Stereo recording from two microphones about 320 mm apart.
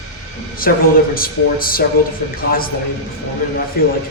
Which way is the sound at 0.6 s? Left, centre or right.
Left.